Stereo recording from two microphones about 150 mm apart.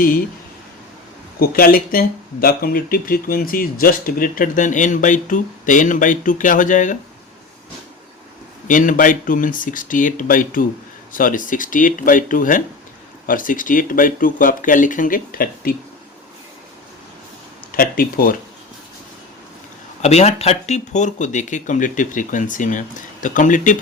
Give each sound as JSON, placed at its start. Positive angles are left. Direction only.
{"t": 1.4, "sound": "speech", "side_deg": 80}
{"t": 8.6, "sound": "speech", "side_deg": 60}
{"t": 17.7, "sound": "speech", "side_deg": 75}
{"t": 20.0, "sound": "speech", "side_deg": 45}